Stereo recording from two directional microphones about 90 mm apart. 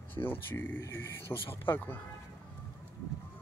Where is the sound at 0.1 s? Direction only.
20° left (ahead or behind).